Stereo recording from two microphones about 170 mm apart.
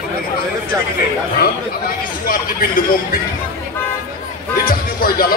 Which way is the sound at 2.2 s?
60° left (ahead or behind).